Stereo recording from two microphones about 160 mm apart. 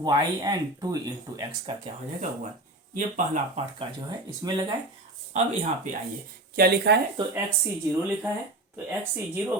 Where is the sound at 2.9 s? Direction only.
50° right (ahead or behind).